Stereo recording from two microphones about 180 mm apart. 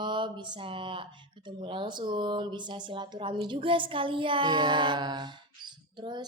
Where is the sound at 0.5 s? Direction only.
30° right (ahead or behind).